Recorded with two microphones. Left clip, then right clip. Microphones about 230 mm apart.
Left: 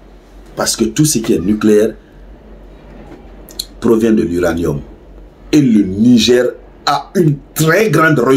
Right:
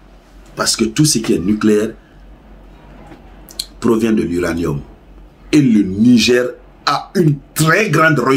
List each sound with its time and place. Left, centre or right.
0.6 s speech: centre
3.8 s speech: centre